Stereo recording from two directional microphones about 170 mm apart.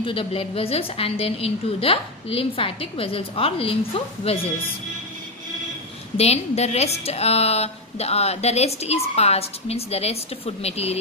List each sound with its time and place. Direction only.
0.0 s speech: 30° left (ahead or behind)
6.1 s speech: 40° left (ahead or behind)